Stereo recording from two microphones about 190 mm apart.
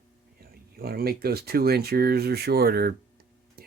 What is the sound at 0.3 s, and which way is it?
Speech, 50° right (ahead or behind).